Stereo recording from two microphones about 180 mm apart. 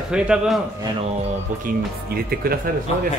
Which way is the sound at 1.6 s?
55° right (ahead or behind).